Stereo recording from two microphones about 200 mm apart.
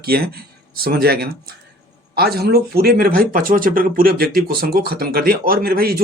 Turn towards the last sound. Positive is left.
turn(degrees=-50)  # may be behind; listen again after turning